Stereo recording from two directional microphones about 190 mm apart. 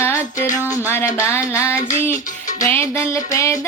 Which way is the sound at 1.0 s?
15° left (ahead or behind).